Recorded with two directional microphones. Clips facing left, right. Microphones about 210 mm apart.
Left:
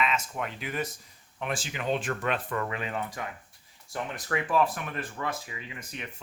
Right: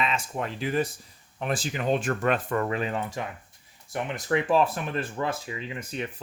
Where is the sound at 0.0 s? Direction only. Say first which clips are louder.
Right 1 dB; 30° right (ahead or behind).